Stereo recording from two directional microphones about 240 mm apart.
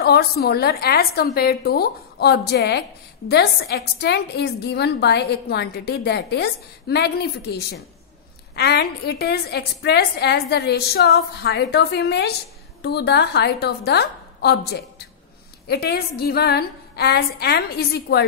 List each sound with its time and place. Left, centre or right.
0.0 s a woman's voice: left